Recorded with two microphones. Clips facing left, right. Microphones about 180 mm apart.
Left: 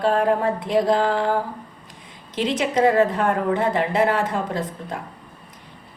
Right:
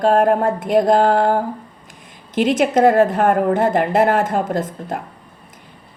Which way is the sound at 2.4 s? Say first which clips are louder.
Right 5 dB; 50° right (ahead or behind).